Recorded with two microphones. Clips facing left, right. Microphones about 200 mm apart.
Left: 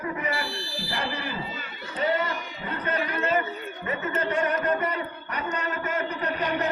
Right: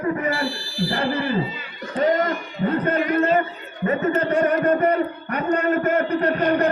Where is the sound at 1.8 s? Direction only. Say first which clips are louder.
Right 7 dB; 45° right (ahead or behind).